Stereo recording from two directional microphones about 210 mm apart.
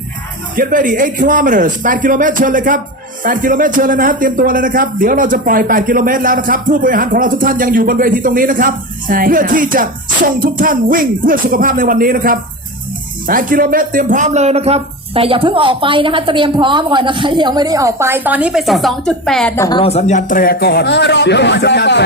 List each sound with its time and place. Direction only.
0.5 s a man's voice: 40° right (ahead or behind); by 19.8 s 15° left (ahead or behind)
19.8 s speech: 30° left (ahead or behind); by 22.0 s 55° left (ahead or behind)